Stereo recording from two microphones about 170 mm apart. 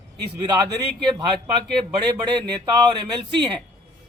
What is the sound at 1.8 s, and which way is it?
A man's voice, 25° right (ahead or behind).